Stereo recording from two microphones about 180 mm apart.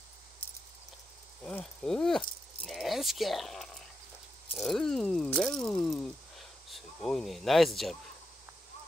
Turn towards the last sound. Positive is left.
turn(degrees=0)  # may be behind; listen again after turning